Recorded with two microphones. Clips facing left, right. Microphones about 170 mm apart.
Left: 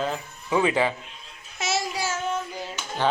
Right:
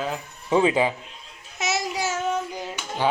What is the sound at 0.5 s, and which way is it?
Speech, 20° right (ahead or behind).